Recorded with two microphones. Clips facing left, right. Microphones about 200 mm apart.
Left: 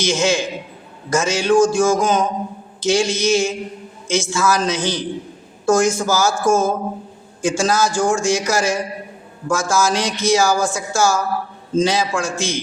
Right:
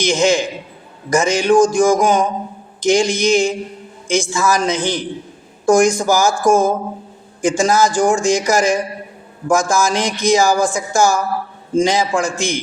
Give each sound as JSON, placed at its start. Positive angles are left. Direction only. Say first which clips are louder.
{"t": 0.0, "sound": "speech", "louder": "right 3 dB", "side_deg": -15}